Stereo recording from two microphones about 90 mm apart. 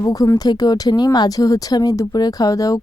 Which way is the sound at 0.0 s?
40° left (ahead or behind).